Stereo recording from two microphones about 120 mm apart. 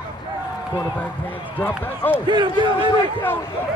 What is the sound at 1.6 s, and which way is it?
Speech, 15° left (ahead or behind).